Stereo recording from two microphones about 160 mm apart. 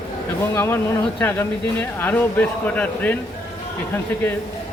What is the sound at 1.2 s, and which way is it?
Speech, 15° left (ahead or behind).